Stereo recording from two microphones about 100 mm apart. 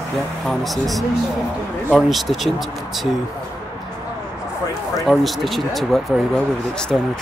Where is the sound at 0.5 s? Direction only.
Centre (ahead or behind).